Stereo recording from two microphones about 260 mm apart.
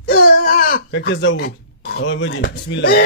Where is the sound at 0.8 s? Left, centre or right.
Left.